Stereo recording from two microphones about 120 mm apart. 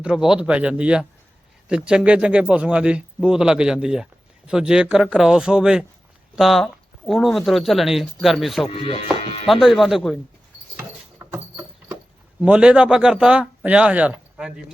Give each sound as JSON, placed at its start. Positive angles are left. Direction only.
{"t": 0.0, "sound": "speech", "side_deg": -5}
{"t": 8.7, "sound": "speech", "side_deg": 45}
{"t": 9.5, "sound": "speech", "side_deg": 0}
{"t": 10.8, "sound": "a sound", "side_deg": -20}
{"t": 12.4, "sound": "speech", "side_deg": -10}